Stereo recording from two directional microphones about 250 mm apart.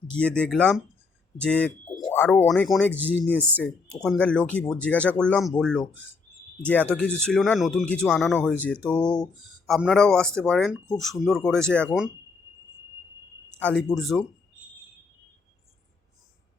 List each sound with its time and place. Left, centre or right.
0.2 s speech: centre
2.0 s a sound: centre
2.2 s speech: centre
13.6 s speech: centre